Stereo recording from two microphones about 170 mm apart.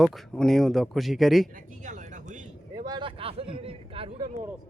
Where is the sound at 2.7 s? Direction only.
25° right (ahead or behind).